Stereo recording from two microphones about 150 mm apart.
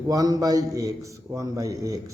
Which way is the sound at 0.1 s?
25° right (ahead or behind).